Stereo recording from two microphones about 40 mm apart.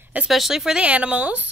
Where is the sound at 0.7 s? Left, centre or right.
Right.